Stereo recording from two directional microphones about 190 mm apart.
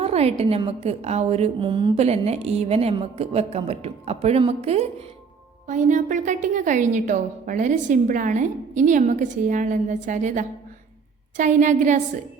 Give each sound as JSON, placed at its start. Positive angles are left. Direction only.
{"t": 0.0, "sound": "a woman's voice", "side_deg": -35}